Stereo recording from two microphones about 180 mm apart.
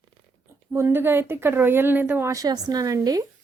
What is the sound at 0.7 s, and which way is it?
A woman's voice, 15° right (ahead or behind).